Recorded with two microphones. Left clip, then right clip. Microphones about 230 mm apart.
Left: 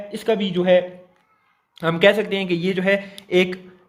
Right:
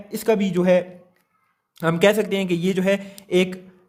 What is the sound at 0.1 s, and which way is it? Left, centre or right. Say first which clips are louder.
A man's voice: right 1 dB; right.